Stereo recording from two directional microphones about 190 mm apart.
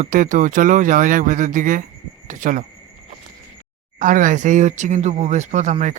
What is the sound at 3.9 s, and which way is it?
Speech, 45° right (ahead or behind).